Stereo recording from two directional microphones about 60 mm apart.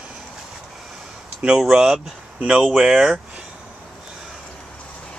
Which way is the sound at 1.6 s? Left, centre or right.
Centre.